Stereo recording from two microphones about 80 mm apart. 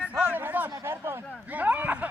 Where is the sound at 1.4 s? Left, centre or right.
Centre.